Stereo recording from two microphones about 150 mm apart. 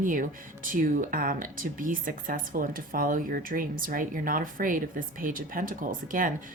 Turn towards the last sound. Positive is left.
turn(degrees=-65)  # may be behind; listen again after turning